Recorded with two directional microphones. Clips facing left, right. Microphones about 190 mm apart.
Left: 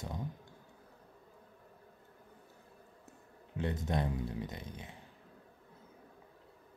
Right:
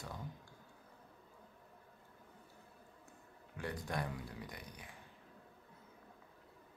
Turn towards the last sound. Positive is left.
turn(degrees=25)  # may be behind; listen again after turning